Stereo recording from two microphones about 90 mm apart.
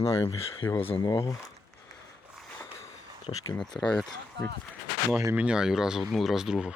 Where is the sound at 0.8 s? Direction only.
90° left.